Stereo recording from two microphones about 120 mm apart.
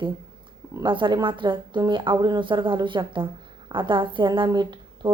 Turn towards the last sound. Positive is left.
turn(degrees=-40)  # may be behind; listen again after turning